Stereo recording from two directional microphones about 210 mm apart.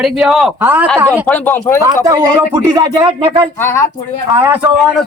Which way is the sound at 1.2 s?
10° left (ahead or behind).